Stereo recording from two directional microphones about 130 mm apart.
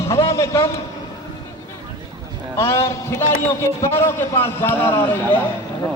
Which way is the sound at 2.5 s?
20° left (ahead or behind).